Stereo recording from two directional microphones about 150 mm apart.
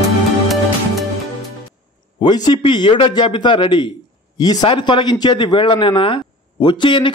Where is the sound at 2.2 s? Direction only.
30° left (ahead or behind).